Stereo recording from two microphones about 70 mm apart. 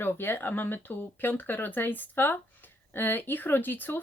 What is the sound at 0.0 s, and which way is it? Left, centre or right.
Speech, left.